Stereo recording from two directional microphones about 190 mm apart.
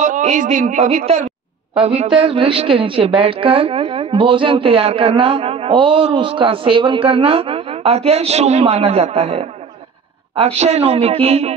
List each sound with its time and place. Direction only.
0.0 s a woman's voice: 40° right (ahead or behind)